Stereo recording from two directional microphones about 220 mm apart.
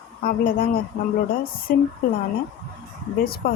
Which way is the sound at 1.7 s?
40° left (ahead or behind).